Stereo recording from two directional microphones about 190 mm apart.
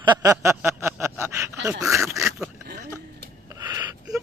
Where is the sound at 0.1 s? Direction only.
15° right (ahead or behind).